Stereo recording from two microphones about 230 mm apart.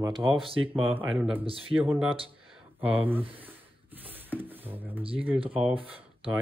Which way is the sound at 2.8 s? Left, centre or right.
Centre.